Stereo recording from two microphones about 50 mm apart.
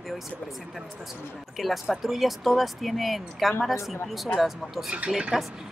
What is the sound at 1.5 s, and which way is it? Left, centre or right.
Speech, centre.